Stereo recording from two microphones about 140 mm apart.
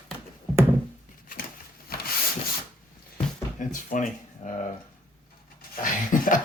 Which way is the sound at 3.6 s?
65° left (ahead or behind).